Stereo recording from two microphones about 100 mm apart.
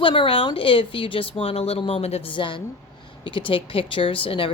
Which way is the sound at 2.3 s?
55° left (ahead or behind).